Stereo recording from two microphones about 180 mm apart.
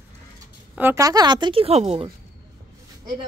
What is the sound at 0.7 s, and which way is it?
A woman's voice, 15° right (ahead or behind).